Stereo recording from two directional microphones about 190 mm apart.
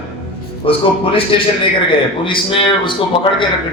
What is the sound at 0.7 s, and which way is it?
A man's voice, 30° left (ahead or behind).